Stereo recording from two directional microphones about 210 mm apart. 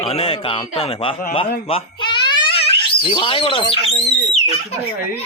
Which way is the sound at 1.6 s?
25° left (ahead or behind).